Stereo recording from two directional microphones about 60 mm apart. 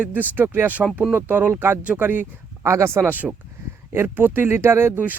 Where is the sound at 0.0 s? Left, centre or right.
Right.